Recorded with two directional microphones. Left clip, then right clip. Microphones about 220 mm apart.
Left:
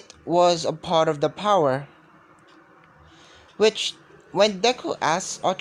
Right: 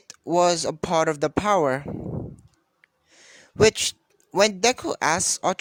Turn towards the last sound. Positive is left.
turn(degrees=-50)  # may be behind; listen again after turning